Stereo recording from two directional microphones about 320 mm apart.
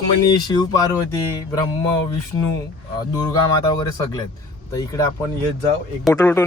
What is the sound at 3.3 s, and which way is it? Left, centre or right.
Speech, centre.